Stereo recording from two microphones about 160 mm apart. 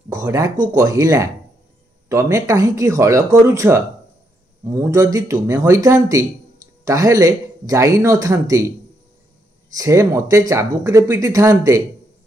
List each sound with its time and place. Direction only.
0.1 s speech: 20° right (ahead or behind)
9.8 s speech: 20° right (ahead or behind)